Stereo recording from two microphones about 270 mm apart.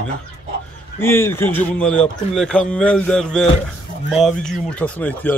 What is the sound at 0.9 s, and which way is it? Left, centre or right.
Speech, centre.